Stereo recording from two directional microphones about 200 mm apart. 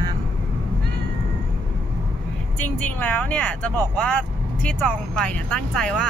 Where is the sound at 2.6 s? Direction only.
10° left (ahead or behind).